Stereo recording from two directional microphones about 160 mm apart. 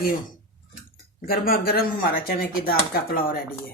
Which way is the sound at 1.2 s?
70° left (ahead or behind).